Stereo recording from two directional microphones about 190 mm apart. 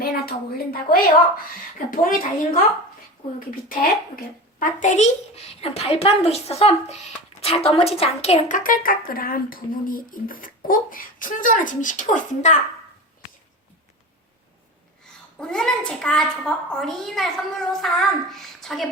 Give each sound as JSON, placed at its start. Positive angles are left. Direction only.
{"t": 0.0, "sound": "a woman's voice", "side_deg": 55}
{"t": 15.0, "sound": "a sound", "side_deg": 5}
{"t": 15.9, "sound": "a woman's voice", "side_deg": 5}